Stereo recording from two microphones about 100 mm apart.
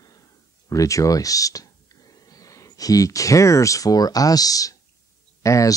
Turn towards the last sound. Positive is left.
turn(degrees=30)  # may be behind; listen again after turning